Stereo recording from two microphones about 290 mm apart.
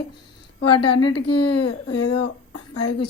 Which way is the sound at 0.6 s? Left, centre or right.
Left.